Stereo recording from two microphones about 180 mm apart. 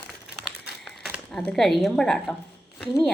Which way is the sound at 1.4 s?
Centre (ahead or behind).